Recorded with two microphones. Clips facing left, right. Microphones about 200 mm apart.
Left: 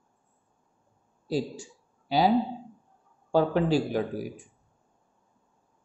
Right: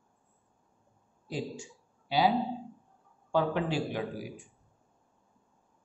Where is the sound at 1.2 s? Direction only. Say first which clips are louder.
Left 7 dB; 35° left (ahead or behind).